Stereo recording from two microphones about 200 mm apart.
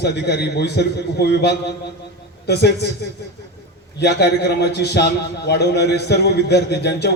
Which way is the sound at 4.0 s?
55° left (ahead or behind).